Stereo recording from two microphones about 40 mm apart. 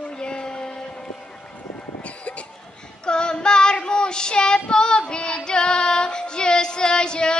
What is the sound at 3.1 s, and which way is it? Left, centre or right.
Child singing, left.